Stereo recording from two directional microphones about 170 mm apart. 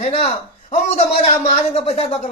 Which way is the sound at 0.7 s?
45° left (ahead or behind).